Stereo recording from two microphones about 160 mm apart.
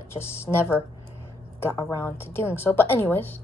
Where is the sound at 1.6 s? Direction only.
15° left (ahead or behind).